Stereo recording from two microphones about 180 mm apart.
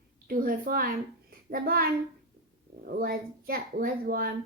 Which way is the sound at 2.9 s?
55° right (ahead or behind).